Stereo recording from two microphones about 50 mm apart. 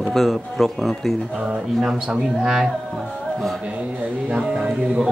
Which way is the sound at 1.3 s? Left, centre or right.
Centre.